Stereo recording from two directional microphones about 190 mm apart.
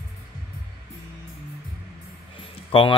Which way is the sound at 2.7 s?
30° left (ahead or behind).